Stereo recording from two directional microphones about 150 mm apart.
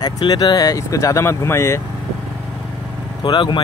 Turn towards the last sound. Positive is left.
turn(degrees=30)  # may be behind; listen again after turning